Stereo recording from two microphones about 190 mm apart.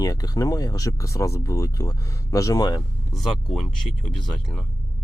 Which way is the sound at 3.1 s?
Centre (ahead or behind).